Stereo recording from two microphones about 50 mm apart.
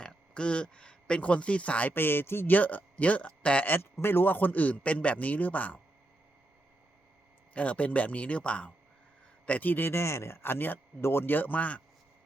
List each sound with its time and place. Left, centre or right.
0.0 s speech: centre
1.9 s speech: left
2.5 s speech: left
4.0 s a man's voice: left
7.5 s a man's voice: left
9.9 s a man's voice: left